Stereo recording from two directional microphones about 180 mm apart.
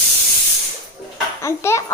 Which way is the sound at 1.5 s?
15° left (ahead or behind).